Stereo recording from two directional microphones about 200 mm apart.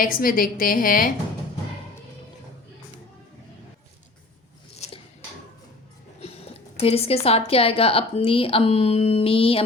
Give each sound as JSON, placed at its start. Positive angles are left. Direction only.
{"t": 0.0, "sound": "a woman's voice", "side_deg": 45}
{"t": 6.7, "sound": "a woman's voice", "side_deg": 30}